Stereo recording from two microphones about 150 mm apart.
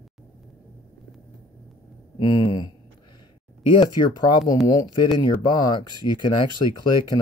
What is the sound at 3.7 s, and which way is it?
Speech, 30° left (ahead or behind).